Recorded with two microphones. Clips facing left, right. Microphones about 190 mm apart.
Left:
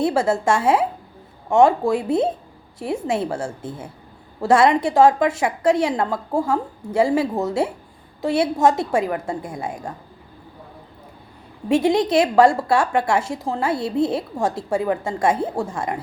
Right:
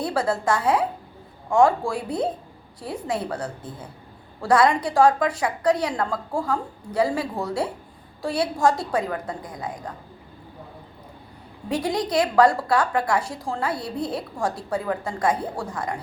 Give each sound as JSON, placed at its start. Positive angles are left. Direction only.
{"t": 0.0, "sound": "a woman's voice", "side_deg": 25}
{"t": 11.7, "sound": "a woman's voice", "side_deg": 25}